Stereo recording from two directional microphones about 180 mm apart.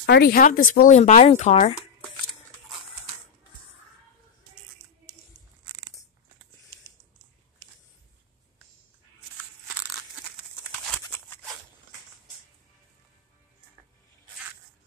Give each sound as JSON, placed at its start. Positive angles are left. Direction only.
{"t": 0.0, "sound": "speech", "side_deg": 65}
{"t": 11.1, "sound": "scissors", "side_deg": 10}